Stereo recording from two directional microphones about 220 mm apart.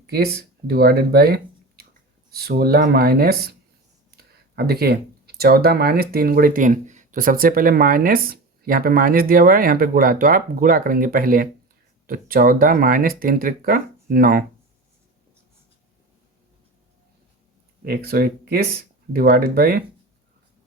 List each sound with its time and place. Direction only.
0.1 s speech: 45° right (ahead or behind)
4.5 s speech: 45° right (ahead or behind)
17.8 s speech: 40° right (ahead or behind)